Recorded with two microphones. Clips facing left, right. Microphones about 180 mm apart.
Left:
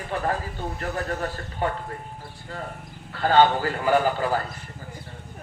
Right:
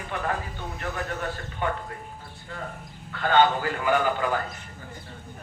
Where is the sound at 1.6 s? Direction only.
35° left (ahead or behind).